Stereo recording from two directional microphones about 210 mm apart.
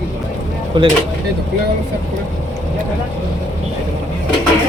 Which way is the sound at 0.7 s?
25° right (ahead or behind).